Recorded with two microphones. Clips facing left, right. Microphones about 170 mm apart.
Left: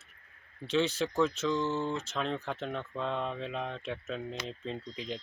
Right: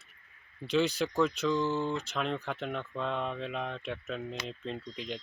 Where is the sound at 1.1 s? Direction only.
5° left (ahead or behind).